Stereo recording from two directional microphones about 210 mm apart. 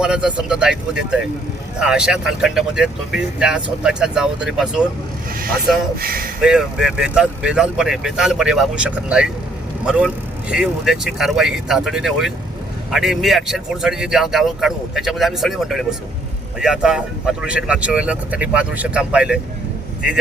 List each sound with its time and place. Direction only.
0.0 s speech: 5° right (ahead or behind)
6.0 s speech: 45° right (ahead or behind)
6.4 s speech: 5° right (ahead or behind)